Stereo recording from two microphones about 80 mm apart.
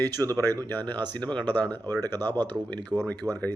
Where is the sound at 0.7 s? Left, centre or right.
Left.